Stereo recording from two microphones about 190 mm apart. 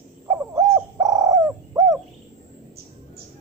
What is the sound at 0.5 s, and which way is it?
Bird, 15° right (ahead or behind).